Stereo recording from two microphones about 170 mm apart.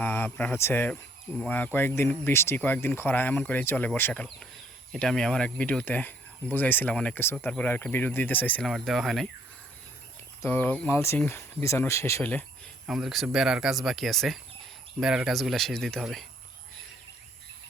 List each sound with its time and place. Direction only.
0.0 s speech: 10° left (ahead or behind)
10.4 s speech: 10° left (ahead or behind)
12.9 s speech: centre (ahead or behind)